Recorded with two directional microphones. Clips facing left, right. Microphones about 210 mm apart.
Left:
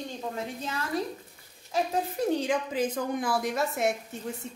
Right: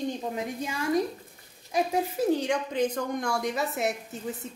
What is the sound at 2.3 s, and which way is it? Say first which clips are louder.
Speech: right 1 dB; centre (ahead or behind).